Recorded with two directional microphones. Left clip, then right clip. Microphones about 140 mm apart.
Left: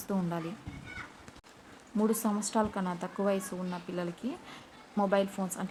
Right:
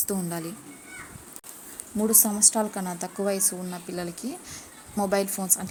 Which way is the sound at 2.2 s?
15° right (ahead or behind).